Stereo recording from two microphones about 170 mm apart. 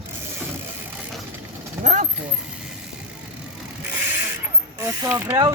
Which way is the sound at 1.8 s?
45° right (ahead or behind).